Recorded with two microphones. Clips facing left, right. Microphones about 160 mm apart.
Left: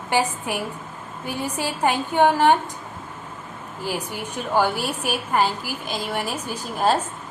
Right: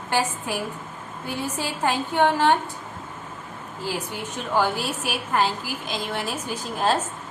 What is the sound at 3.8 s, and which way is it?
A woman's voice, 10° left (ahead or behind).